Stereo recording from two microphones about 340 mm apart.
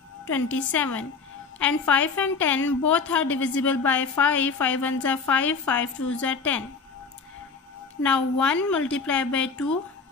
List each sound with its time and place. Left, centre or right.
0.5 s a woman's voice: left
1.6 s a woman's voice: centre
8.0 s a woman's voice: centre